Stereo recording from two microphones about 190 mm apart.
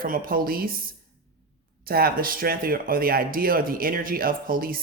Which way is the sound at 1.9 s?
50° right (ahead or behind).